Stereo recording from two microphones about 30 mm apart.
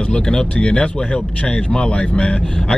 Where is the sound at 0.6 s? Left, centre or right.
Left.